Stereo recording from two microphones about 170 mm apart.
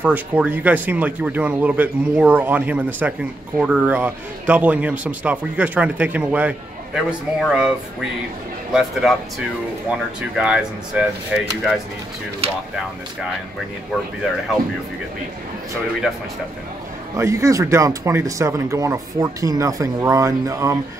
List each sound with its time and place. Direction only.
0.0 s speech: 10° right (ahead or behind)
8.7 s speech: centre (ahead or behind)
17.2 s speech: 15° right (ahead or behind)